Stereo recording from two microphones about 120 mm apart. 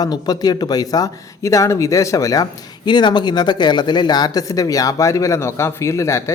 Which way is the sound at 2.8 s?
40° left (ahead or behind).